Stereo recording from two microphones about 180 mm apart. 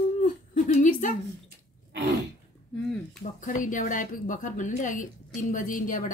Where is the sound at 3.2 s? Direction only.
45° left (ahead or behind).